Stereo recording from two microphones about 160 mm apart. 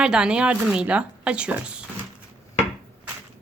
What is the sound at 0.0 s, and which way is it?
Speech, 5° right (ahead or behind).